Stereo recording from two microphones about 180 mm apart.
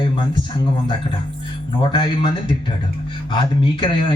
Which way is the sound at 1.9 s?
25° left (ahead or behind).